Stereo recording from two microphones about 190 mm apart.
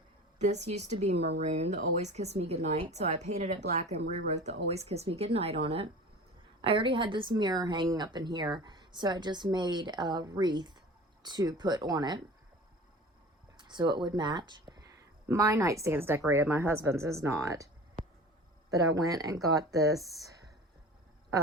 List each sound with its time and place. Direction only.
0.3 s speech: 35° right (ahead or behind)
13.6 s a woman's voice: 25° right (ahead or behind)
18.0 s a sound: 45° right (ahead or behind)
18.7 s speech: 20° right (ahead or behind)